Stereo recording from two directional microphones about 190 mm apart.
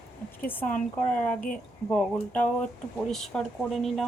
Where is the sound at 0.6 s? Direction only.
45° left (ahead or behind).